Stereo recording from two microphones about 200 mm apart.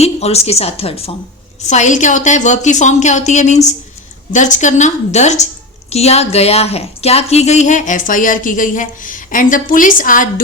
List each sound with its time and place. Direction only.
0.0 s a woman's voice: 30° left (ahead or behind)